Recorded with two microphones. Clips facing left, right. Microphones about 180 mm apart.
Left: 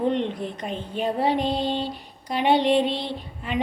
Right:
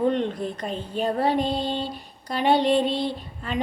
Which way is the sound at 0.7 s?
40° right (ahead or behind).